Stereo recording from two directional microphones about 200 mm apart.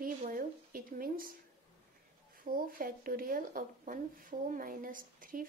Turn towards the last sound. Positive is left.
turn(degrees=-45)  # may be behind; listen again after turning